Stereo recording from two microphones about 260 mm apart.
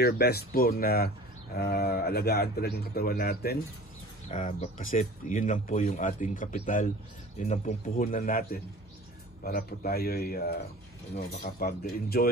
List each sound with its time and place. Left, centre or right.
0.0 s speech: left